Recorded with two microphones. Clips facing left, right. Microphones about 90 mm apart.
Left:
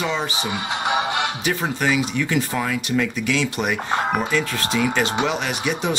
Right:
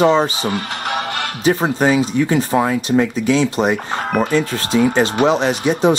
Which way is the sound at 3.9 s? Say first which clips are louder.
Even; 15° left (ahead or behind).